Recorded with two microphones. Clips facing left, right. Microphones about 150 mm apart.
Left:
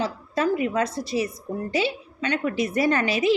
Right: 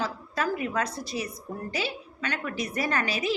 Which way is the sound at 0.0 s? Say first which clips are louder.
Left 5 dB; 25° left (ahead or behind).